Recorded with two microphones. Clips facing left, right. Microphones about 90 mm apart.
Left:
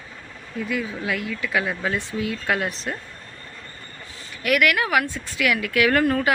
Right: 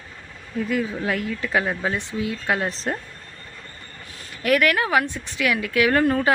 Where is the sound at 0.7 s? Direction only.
40° right (ahead or behind).